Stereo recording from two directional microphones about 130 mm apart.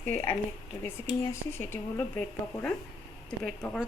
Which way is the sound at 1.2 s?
20° left (ahead or behind).